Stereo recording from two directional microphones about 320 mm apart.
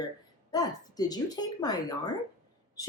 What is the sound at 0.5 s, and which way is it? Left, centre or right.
A woman's voice, centre.